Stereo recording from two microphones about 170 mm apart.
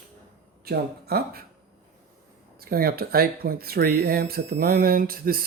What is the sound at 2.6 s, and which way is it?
Speech, 60° right (ahead or behind).